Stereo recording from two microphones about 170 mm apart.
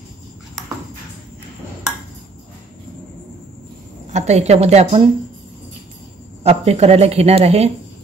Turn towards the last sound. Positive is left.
turn(degrees=-40)  # may be behind; listen again after turning